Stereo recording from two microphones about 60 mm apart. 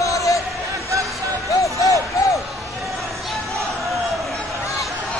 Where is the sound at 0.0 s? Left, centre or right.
Left.